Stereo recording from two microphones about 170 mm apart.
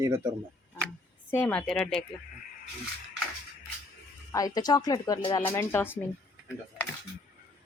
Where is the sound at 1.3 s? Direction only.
10° left (ahead or behind).